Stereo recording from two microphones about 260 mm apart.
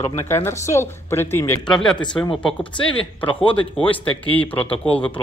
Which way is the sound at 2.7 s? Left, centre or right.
Centre.